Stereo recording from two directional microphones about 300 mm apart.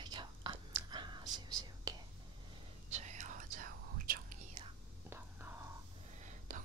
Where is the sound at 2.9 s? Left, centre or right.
Right.